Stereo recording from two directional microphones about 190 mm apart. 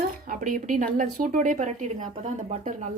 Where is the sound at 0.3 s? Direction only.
45° right (ahead or behind).